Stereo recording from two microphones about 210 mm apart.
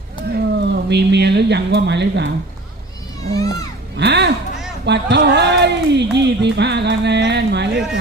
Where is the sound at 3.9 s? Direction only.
55° right (ahead or behind).